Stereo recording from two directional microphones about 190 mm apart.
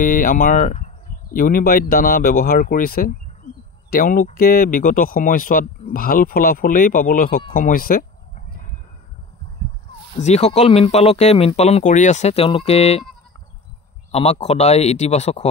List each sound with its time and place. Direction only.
0.0 s speech: 45° left (ahead or behind)
10.1 s speech: 35° left (ahead or behind)
14.1 s speech: 35° left (ahead or behind)